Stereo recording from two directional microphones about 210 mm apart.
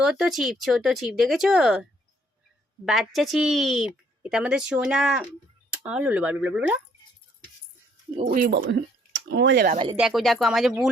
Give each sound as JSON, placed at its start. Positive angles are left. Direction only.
{"t": 0.0, "sound": "a woman's voice", "side_deg": 0}
{"t": 8.2, "sound": "speech", "side_deg": -40}
{"t": 9.3, "sound": "speech", "side_deg": -55}
{"t": 9.7, "sound": "speech", "side_deg": -25}
{"t": 10.0, "sound": "a woman's voice", "side_deg": 0}